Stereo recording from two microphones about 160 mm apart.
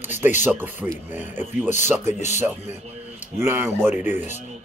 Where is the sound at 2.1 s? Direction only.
45° left (ahead or behind).